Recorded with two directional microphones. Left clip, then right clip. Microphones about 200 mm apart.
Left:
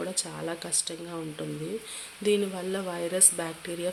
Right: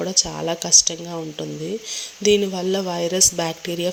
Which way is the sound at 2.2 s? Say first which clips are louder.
Right 9 dB; 25° right (ahead or behind).